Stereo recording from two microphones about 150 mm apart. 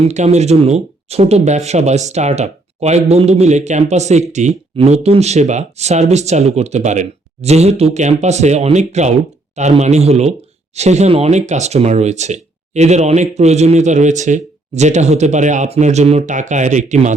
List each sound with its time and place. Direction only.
0.0 s speech: 50° right (ahead or behind)